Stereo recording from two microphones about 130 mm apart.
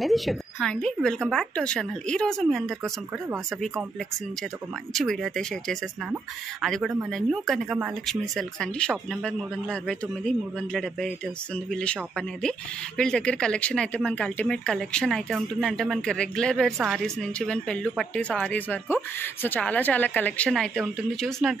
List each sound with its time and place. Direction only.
0.0 s a woman's voice: centre (ahead or behind)
4.9 s a woman's voice: centre (ahead or behind)
16.7 s speech: 5° right (ahead or behind)
17.0 s speech: 5° left (ahead or behind)